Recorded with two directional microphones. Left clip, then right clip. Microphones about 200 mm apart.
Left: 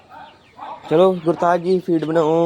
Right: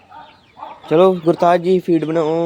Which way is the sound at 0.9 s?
15° right (ahead or behind).